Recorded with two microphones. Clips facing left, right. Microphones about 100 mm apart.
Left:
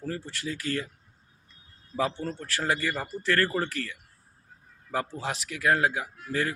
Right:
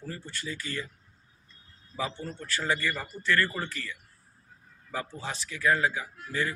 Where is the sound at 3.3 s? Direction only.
40° left (ahead or behind).